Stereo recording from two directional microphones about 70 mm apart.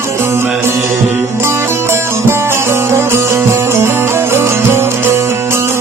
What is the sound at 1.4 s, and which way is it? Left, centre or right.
Music, right.